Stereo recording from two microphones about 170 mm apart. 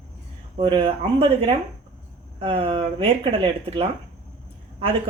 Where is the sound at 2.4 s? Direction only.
30° right (ahead or behind).